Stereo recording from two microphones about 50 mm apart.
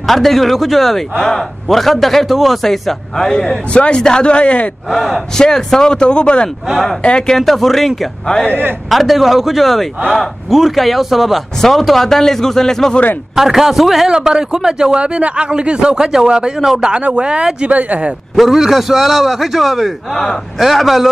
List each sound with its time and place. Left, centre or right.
0.0 s speech: centre; by 4.6 s left
4.9 s speech: centre
7.3 s speech: centre
8.9 s speech: centre
13.4 s speech: centre
14.0 s a man's voice: centre
18.3 s speech: centre